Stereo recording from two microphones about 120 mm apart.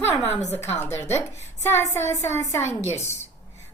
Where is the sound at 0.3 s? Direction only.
15° left (ahead or behind).